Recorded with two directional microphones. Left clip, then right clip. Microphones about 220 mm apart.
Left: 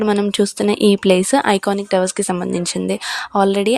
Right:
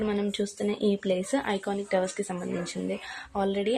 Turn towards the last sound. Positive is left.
turn(degrees=40)  # may be behind; listen again after turning